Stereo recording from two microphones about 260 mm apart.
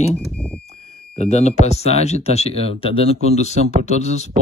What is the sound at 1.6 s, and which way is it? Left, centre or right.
A man's voice, left.